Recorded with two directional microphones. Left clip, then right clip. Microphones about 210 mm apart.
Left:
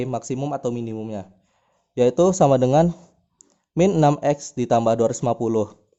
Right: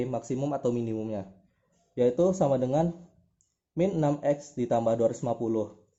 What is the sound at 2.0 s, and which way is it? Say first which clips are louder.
Speech: left 8 dB; 40° left (ahead or behind).